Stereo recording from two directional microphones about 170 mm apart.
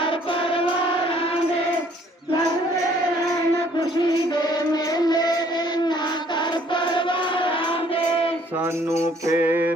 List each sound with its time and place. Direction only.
0.0 s music: 30° left (ahead or behind)
3.8 s music: 25° left (ahead or behind)
8.6 s music: 15° right (ahead or behind)